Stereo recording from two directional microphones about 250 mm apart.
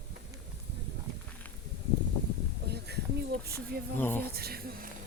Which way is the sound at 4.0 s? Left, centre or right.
Centre.